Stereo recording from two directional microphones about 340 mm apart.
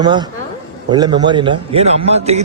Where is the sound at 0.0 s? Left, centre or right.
Centre.